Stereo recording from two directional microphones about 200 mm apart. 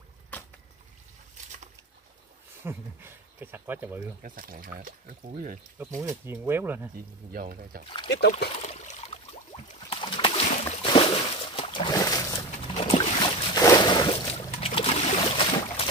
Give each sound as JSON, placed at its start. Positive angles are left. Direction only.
{"t": 0.3, "sound": "boat", "side_deg": 10}
{"t": 2.6, "sound": "speech", "side_deg": -10}
{"t": 4.2, "sound": "speech", "side_deg": -45}
{"t": 6.0, "sound": "speech", "side_deg": -10}
{"t": 7.3, "sound": "speech", "side_deg": -45}
{"t": 8.1, "sound": "speech", "side_deg": 55}
{"t": 8.5, "sound": "a sound", "side_deg": 35}
{"t": 12.8, "sound": "a sound", "side_deg": 30}